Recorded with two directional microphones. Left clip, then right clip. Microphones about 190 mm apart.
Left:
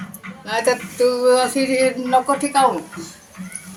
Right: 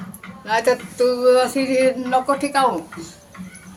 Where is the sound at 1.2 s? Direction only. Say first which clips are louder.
Right 1 dB; 30° right (ahead or behind).